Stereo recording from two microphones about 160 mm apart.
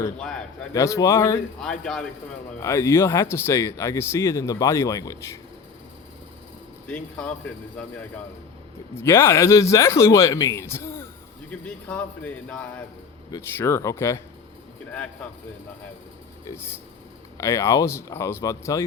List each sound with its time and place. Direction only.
0.2 s a man's voice: 5° left (ahead or behind)
0.7 s speech: 20° left (ahead or behind)
1.8 s a man's voice: 5° left (ahead or behind)
2.6 s speech: 20° left (ahead or behind)
6.8 s speech: 10° left (ahead or behind)
9.0 s speech: 15° left (ahead or behind)
16.5 s speech: 15° left (ahead or behind)